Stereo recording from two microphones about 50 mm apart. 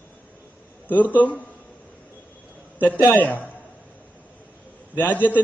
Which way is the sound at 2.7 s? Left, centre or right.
Left.